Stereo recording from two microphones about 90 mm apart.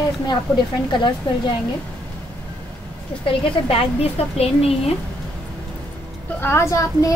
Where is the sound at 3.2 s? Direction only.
90° left.